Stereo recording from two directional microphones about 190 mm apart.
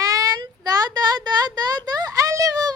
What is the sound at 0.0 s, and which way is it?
Child singing, 20° right (ahead or behind).